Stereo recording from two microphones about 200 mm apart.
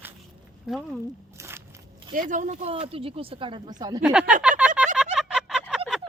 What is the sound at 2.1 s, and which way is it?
Speech, 40° right (ahead or behind).